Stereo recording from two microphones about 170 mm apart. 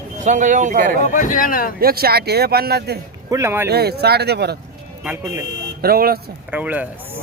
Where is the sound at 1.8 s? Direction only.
65° right (ahead or behind).